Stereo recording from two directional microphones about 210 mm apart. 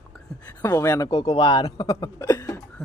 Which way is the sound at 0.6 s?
15° left (ahead or behind).